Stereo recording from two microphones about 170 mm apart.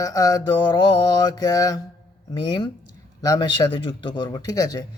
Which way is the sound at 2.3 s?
30° left (ahead or behind).